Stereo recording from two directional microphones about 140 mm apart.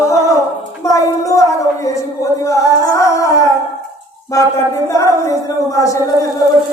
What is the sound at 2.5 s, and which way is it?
Music, 25° left (ahead or behind).